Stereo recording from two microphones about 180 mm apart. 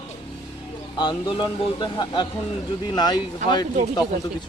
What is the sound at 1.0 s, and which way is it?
Speech, 30° left (ahead or behind).